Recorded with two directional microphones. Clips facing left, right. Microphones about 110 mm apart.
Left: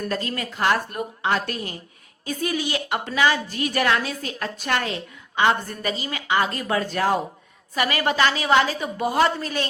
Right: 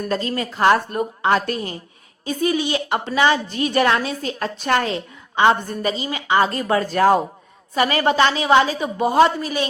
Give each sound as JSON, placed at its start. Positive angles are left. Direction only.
{"t": 0.1, "sound": "a woman's voice", "side_deg": -25}
{"t": 0.5, "sound": "a woman's voice", "side_deg": -40}
{"t": 2.2, "sound": "a woman's voice", "side_deg": -25}
{"t": 9.4, "sound": "a woman's voice", "side_deg": -10}